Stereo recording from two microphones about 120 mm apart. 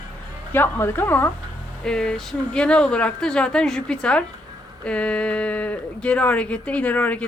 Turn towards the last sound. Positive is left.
turn(degrees=15)  # may be behind; listen again after turning